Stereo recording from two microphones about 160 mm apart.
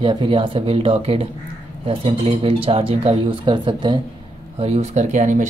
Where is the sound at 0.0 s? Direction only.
30° right (ahead or behind).